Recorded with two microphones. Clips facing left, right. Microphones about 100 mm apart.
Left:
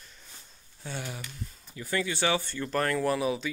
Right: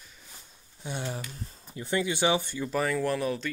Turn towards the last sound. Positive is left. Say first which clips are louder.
# left 1 dB
turn(degrees=5)  # may be behind; listen again after turning